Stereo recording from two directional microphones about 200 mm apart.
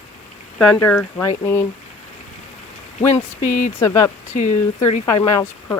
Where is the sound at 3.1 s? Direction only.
35° left (ahead or behind).